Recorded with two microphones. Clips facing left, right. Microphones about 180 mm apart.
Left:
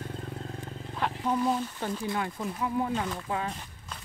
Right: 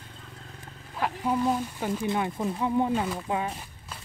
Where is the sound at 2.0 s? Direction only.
20° right (ahead or behind).